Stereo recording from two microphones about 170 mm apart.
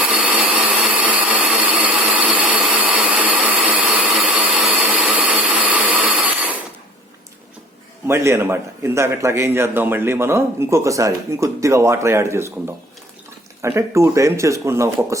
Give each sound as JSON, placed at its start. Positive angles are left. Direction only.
{"t": 0.1, "sound": "blender", "side_deg": -5}
{"t": 8.0, "sound": "a man's voice", "side_deg": -15}